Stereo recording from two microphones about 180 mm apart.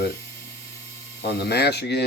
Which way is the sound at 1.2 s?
65° left (ahead or behind).